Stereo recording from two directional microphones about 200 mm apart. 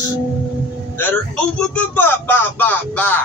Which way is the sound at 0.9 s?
5° left (ahead or behind).